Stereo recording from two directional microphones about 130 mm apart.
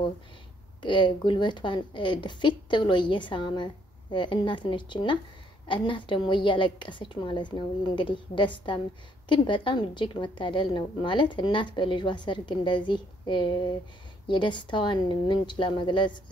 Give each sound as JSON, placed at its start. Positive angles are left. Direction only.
{"t": 0.8, "sound": "a woman's voice", "side_deg": 40}